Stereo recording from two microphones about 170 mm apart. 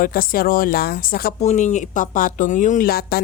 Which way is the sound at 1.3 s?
45° left (ahead or behind).